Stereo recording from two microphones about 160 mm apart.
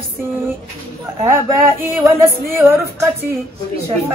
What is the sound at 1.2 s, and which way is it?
Music, 15° right (ahead or behind).